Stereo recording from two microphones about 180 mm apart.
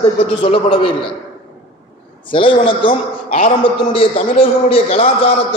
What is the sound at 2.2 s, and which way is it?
A man's voice, 30° left (ahead or behind).